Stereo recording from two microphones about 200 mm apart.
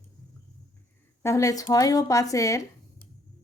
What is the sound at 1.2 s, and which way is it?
A woman's voice, 15° left (ahead or behind).